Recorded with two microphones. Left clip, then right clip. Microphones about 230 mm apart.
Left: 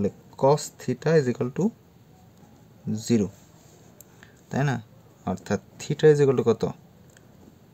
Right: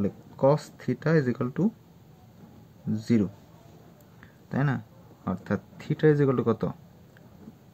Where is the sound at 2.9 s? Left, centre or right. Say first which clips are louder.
Left 2 dB; left.